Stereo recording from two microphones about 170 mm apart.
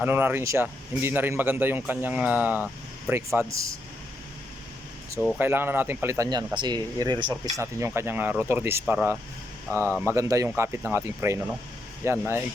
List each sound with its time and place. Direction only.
0.0 s speech: 10° right (ahead or behind)
5.4 s speech: 10° right (ahead or behind)